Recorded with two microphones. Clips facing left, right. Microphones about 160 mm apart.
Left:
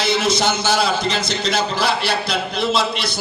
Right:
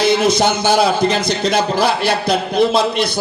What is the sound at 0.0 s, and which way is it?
Speech, 55° right (ahead or behind).